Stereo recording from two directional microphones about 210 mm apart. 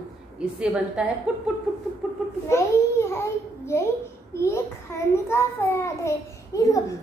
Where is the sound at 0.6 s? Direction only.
5° right (ahead or behind).